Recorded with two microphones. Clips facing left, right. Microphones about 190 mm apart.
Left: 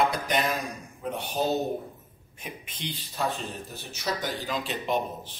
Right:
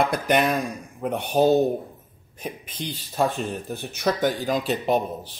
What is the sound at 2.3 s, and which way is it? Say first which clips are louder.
Speech: right 8 dB; 40° right (ahead or behind).